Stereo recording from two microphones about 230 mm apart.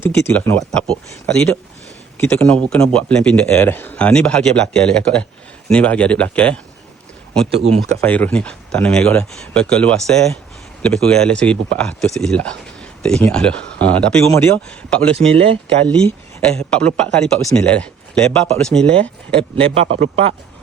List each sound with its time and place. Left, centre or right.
0.0 s speech: centre
8.0 s speech: centre
15.3 s speech: right
15.9 s speech: centre
19.4 s speech: right